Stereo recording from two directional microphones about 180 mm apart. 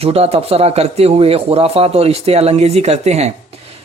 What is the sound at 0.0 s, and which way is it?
A man's voice, 35° right (ahead or behind).